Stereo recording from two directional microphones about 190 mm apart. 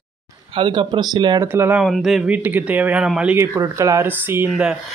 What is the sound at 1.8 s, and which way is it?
Speech, centre (ahead or behind).